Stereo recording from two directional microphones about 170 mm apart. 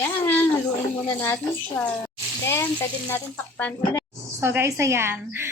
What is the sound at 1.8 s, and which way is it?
Speech, 15° left (ahead or behind).